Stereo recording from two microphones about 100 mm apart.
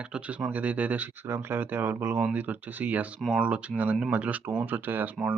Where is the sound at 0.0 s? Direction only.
10° right (ahead or behind).